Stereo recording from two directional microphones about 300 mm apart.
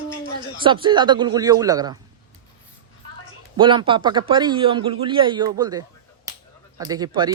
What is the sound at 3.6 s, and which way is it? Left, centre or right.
A man's voice, centre.